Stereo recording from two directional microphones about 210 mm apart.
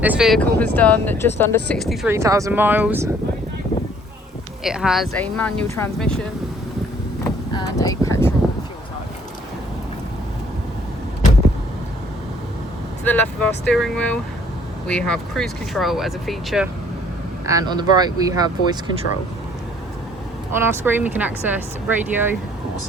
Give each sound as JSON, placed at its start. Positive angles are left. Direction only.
{"t": 0.0, "sound": "speech", "side_deg": -5}
{"t": 2.1, "sound": "speech", "side_deg": -15}
{"t": 4.6, "sound": "speech", "side_deg": 0}
{"t": 7.5, "sound": "speech", "side_deg": 15}
{"t": 13.1, "sound": "speech", "side_deg": 5}
{"t": 17.4, "sound": "speech", "side_deg": -15}
{"t": 20.6, "sound": "speech", "side_deg": -10}